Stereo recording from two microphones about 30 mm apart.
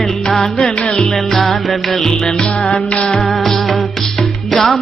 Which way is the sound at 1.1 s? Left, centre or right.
Centre.